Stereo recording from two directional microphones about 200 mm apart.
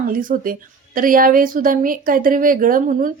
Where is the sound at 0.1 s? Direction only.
45° right (ahead or behind).